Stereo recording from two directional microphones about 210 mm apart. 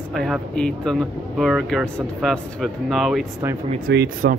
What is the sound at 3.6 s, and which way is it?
Speech, 40° right (ahead or behind).